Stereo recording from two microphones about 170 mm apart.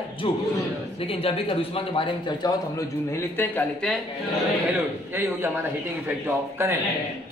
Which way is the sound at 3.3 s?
10° left (ahead or behind).